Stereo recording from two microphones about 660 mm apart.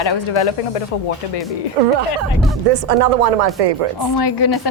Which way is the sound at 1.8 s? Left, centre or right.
Right.